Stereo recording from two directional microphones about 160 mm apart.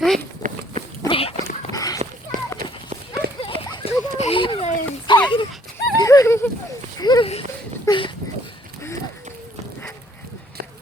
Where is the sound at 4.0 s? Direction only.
40° left (ahead or behind).